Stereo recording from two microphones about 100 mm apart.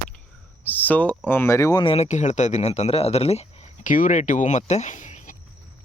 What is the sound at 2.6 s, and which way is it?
Speech, 90° left.